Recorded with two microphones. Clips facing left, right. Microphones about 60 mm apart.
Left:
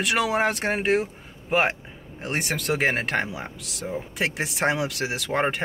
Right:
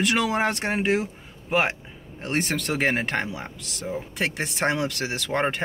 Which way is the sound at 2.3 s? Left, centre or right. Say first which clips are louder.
Even; centre.